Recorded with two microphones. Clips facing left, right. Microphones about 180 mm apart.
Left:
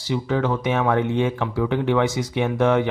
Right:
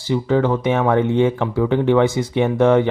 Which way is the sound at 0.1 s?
55° right (ahead or behind).